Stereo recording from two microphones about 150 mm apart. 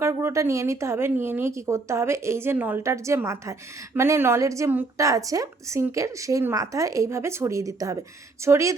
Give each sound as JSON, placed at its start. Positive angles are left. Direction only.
{"t": 0.0, "sound": "a woman's voice", "side_deg": -15}